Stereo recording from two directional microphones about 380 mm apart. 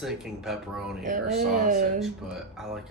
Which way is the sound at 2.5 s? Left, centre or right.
Centre.